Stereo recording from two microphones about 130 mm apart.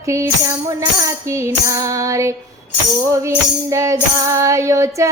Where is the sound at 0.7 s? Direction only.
25° right (ahead or behind).